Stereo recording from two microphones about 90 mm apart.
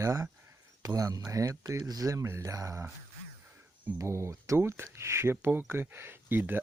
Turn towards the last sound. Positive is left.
turn(degrees=-20)  # may be behind; listen again after turning